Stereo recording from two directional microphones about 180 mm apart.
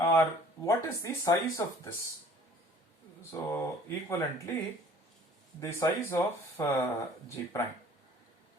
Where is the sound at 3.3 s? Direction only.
20° left (ahead or behind).